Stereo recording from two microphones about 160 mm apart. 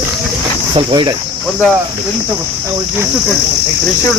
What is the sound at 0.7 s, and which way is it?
Cricket, 25° right (ahead or behind).